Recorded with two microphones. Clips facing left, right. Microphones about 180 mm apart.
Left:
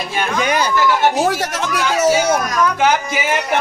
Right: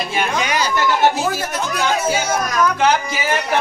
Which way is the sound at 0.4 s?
50° left (ahead or behind).